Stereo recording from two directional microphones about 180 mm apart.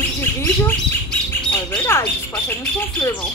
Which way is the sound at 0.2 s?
10° left (ahead or behind).